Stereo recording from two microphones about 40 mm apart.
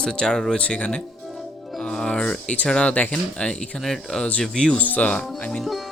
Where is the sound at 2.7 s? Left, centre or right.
Left.